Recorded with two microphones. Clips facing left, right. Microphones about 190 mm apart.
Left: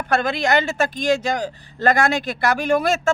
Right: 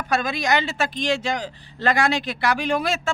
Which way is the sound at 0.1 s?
55° left (ahead or behind).